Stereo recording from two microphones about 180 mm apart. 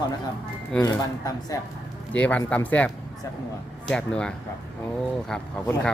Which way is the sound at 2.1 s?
5° left (ahead or behind).